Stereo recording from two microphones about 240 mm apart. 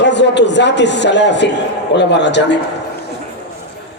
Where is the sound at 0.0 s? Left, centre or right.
Left.